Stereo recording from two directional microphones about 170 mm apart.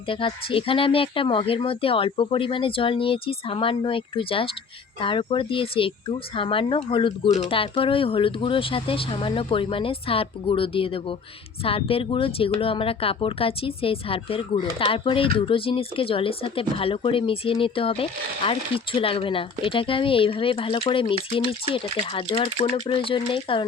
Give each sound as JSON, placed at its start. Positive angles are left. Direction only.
{"t": 0.1, "sound": "speech", "side_deg": 30}